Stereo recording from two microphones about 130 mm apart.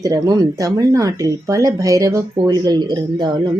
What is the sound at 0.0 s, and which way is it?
A woman's voice, 25° right (ahead or behind).